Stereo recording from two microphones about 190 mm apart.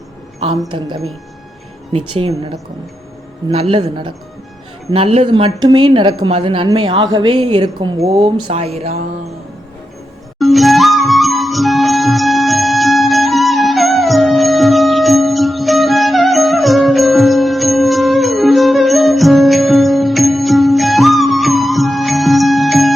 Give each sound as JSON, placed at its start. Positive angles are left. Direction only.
{"t": 0.7, "sound": "a woman's voice", "side_deg": -25}
{"t": 10.3, "sound": "music", "side_deg": 0}